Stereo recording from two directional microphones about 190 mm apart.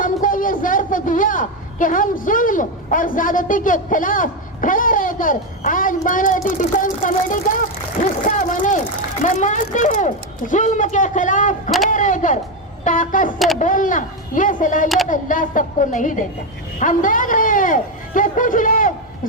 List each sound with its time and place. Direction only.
0.0 s a man's voice: 45° left (ahead or behind)